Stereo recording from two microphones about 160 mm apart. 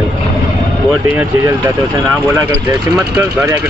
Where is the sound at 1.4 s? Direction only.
15° right (ahead or behind).